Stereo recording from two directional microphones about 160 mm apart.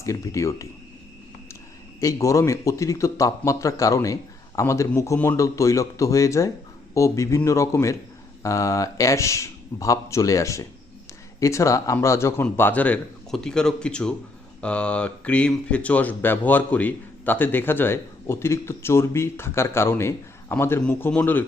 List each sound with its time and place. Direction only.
0.0 s speech: 20° left (ahead or behind)
2.0 s speech: 20° left (ahead or behind)